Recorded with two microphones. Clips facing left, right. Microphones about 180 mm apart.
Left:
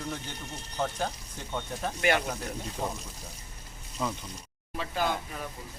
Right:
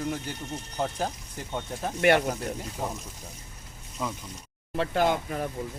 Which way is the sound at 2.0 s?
60° right (ahead or behind).